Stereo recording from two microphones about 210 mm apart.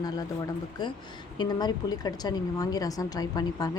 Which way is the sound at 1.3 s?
20° left (ahead or behind).